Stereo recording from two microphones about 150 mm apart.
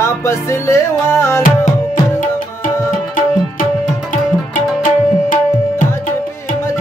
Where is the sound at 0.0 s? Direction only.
20° left (ahead or behind).